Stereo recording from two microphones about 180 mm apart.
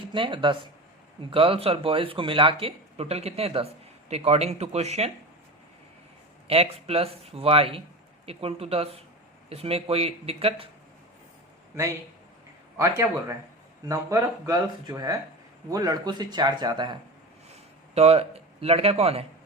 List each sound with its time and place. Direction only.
0.1 s speech: 30° right (ahead or behind)
6.5 s speech: 35° right (ahead or behind)
12.7 s speech: 15° right (ahead or behind); by 19.2 s 35° right (ahead or behind)